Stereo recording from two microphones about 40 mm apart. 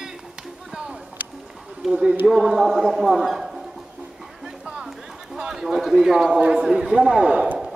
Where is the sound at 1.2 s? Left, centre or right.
Right.